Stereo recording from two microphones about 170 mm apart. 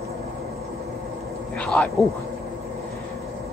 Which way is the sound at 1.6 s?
5° left (ahead or behind).